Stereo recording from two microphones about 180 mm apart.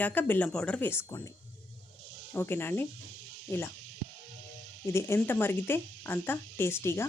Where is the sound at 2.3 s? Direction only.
10° left (ahead or behind).